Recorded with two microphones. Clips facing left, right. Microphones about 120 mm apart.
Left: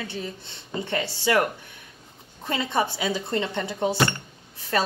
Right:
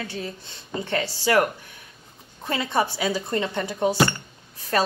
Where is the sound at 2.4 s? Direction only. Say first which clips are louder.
Right 1 dB; 20° left (ahead or behind).